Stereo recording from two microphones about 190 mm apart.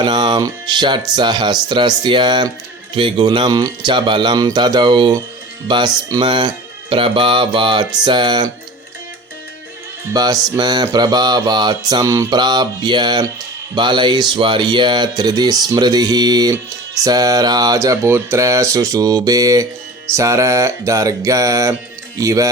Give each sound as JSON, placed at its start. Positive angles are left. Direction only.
{"t": 0.0, "sound": "music", "side_deg": -25}
{"t": 10.1, "sound": "music", "side_deg": -20}
{"t": 15.7, "sound": "speech", "side_deg": -20}